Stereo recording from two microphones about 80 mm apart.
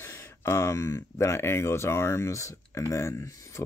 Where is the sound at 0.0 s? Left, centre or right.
Left.